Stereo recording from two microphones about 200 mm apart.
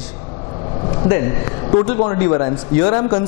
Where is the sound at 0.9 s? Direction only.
20° left (ahead or behind).